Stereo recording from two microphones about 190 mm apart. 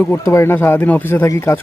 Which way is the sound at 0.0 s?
10° left (ahead or behind).